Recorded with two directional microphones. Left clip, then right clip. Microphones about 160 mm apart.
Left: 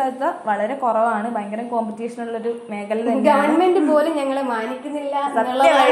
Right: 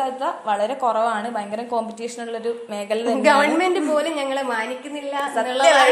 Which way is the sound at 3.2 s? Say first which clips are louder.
Left 1 dB; 50° right (ahead or behind).